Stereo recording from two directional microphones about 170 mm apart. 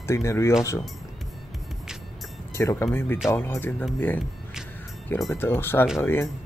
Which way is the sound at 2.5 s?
15° left (ahead or behind).